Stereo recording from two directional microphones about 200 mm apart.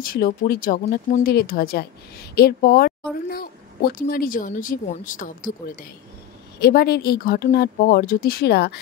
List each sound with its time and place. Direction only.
0.0 s speech: 50° left (ahead or behind)